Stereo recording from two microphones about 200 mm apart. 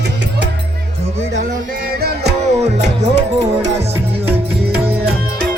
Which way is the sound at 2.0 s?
50° right (ahead or behind).